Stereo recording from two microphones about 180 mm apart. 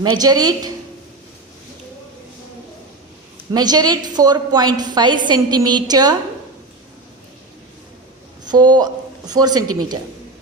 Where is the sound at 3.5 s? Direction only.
20° right (ahead or behind).